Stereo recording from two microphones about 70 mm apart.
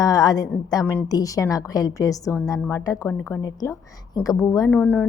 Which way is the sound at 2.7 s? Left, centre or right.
Left.